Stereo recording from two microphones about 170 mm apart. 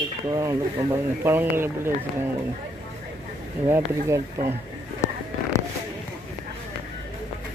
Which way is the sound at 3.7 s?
15° right (ahead or behind).